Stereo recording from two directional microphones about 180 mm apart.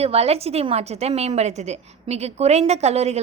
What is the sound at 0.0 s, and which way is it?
Speech, 35° right (ahead or behind).